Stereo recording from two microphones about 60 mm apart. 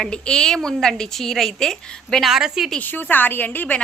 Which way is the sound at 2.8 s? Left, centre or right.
Left.